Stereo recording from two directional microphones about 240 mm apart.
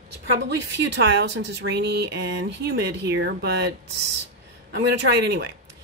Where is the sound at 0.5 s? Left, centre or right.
Right.